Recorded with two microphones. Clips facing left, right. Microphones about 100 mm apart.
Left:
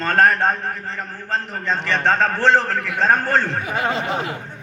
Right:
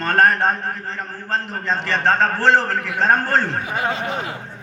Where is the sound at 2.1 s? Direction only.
35° right (ahead or behind).